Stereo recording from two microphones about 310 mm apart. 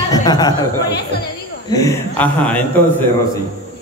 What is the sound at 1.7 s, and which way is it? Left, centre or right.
Speech, centre.